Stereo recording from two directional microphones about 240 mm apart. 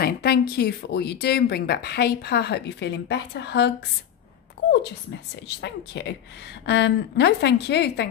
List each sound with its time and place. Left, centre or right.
0.0 s speech: left
5.3 s speech: left